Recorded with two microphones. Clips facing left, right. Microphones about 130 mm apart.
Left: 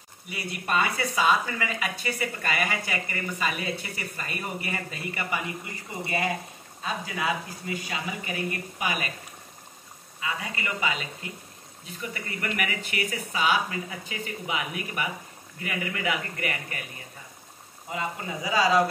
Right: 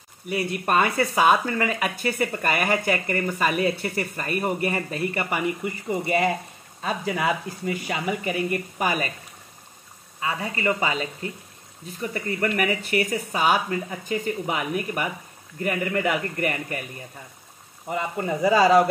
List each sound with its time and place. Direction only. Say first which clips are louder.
0.3 s speech: right 6 dB; 50° right (ahead or behind)
6.8 s speech: right 5 dB; 55° right (ahead or behind)
10.2 s speech: right 7 dB; 40° right (ahead or behind)
17.8 s speech: right 6 dB; 55° right (ahead or behind)